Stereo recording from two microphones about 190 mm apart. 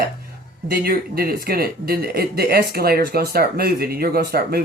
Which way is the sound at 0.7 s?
50° right (ahead or behind).